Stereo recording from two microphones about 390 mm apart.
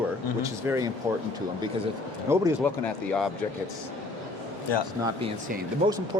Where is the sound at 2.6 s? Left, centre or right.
Centre.